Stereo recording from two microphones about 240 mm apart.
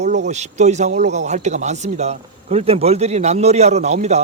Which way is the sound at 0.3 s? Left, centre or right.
Right.